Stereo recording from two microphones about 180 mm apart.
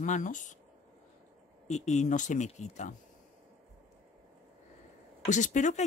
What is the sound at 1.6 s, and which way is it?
Speech, 40° left (ahead or behind).